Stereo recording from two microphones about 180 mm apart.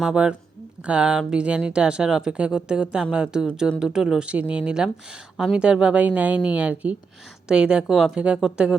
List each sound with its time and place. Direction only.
0.0 s a woman's voice: 5° right (ahead or behind)